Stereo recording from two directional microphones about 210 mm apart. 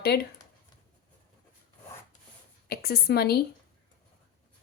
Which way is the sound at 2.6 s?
45° left (ahead or behind).